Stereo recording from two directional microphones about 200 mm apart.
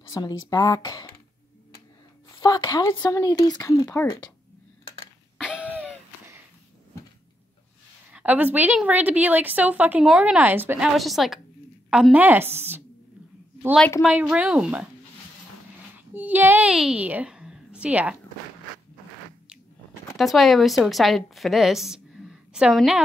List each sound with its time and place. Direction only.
0.1 s a woman's voice: 20° left (ahead or behind)
2.4 s speech: 20° left (ahead or behind)
5.4 s a sound: 5° right (ahead or behind)
8.1 s a woman's voice: 5° right (ahead or behind)
16.1 s a woman's voice: 10° right (ahead or behind)
20.2 s a woman's voice: centre (ahead or behind)